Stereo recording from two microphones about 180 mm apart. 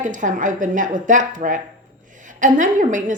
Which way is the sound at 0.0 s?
45° right (ahead or behind).